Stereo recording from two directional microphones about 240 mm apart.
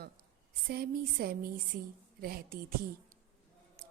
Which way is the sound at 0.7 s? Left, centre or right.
Right.